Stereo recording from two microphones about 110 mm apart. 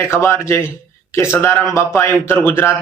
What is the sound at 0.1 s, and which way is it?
Speech, 25° left (ahead or behind).